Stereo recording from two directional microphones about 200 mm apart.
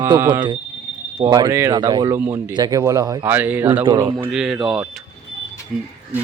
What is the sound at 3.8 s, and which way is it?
Speech, 25° right (ahead or behind).